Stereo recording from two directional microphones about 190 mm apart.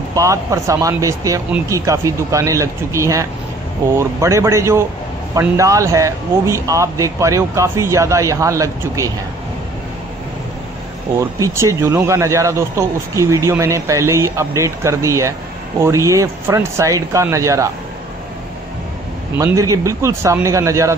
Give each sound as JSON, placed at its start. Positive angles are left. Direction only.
{"t": 0.1, "sound": "speech", "side_deg": -15}
{"t": 11.1, "sound": "speech", "side_deg": -15}
{"t": 19.3, "sound": "speech", "side_deg": -15}